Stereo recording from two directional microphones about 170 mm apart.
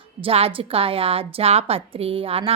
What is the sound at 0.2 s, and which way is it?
A woman's voice, 35° right (ahead or behind).